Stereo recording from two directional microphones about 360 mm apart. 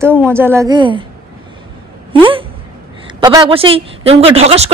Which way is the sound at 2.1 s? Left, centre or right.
Centre.